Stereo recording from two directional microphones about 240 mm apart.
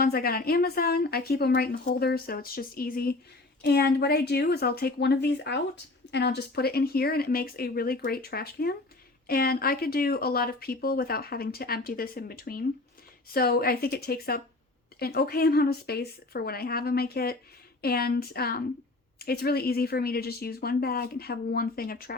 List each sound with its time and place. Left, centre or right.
0.0 s a woman's voice: left